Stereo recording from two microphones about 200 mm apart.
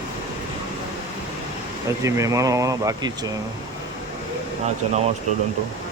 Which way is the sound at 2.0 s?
15° right (ahead or behind).